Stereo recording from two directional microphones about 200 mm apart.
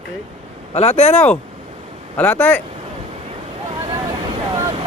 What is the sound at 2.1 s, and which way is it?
Speech, 10° left (ahead or behind).